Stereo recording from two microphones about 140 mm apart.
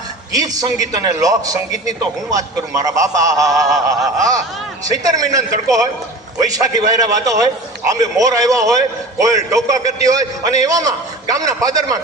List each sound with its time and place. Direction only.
0.3 s a man's voice: 25° right (ahead or behind)